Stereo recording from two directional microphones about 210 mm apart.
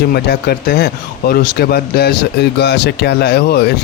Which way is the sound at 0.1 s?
50° left (ahead or behind).